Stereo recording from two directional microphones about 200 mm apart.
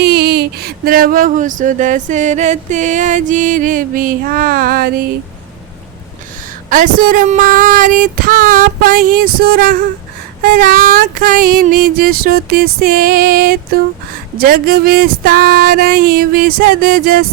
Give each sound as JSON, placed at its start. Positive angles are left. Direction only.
{"t": 0.0, "sound": "speech", "side_deg": -55}
{"t": 6.7, "sound": "child singing", "side_deg": -45}